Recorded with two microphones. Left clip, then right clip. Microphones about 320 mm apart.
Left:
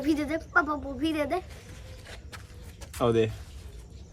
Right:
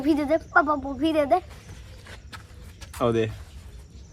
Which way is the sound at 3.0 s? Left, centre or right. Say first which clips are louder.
Right 1 dB; centre.